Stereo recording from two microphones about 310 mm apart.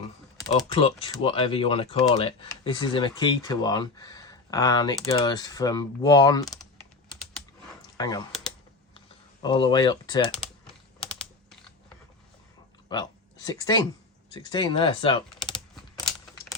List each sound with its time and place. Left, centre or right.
0.3 s speech: centre
7.9 s speech: centre
9.4 s speech: centre
12.9 s speech: centre
15.7 s a sound: centre